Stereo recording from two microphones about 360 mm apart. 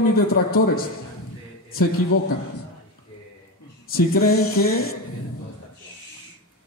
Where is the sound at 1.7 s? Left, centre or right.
Left.